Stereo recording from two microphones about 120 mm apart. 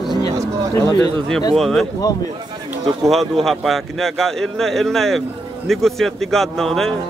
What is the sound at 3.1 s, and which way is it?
A man's voice, centre (ahead or behind).